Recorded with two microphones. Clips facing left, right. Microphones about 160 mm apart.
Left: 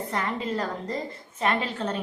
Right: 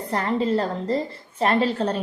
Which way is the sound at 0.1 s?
35° right (ahead or behind).